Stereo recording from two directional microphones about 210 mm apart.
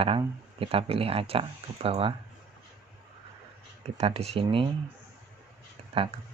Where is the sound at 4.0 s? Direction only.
30° right (ahead or behind).